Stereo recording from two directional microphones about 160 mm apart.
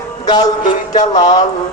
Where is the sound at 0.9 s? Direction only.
50° left (ahead or behind).